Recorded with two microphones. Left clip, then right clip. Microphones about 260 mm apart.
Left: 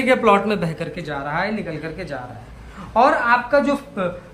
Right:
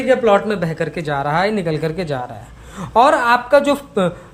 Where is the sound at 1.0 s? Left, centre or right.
Right.